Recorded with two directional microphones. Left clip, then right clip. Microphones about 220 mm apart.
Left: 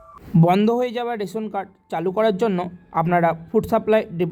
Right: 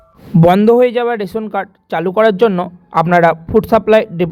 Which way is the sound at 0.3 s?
15° right (ahead or behind).